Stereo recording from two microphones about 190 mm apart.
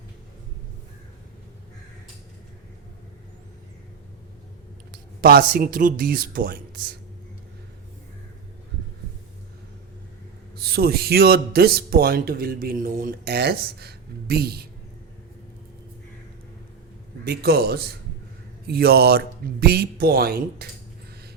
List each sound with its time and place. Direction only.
4.9 s speech: 50° right (ahead or behind)
10.6 s speech: 55° right (ahead or behind)
17.2 s speech: 55° right (ahead or behind)